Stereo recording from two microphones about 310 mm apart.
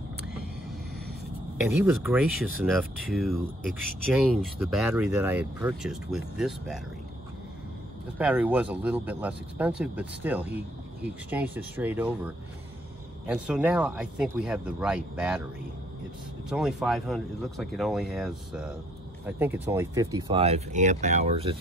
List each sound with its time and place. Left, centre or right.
1.8 s speech: centre
8.2 s speech: centre
13.3 s speech: centre
16.4 s speech: centre